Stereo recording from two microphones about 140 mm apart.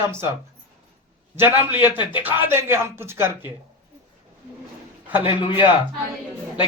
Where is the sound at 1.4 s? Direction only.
10° right (ahead or behind).